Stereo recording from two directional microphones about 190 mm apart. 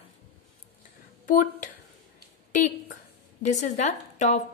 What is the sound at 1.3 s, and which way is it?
A woman's voice, 45° left (ahead or behind).